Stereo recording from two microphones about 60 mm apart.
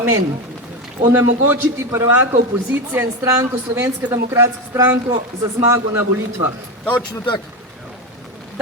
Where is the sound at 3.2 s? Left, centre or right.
Right.